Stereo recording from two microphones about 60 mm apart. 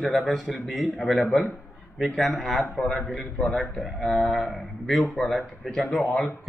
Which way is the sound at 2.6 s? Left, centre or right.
Centre.